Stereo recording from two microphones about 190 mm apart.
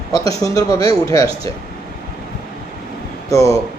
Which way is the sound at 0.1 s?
20° left (ahead or behind).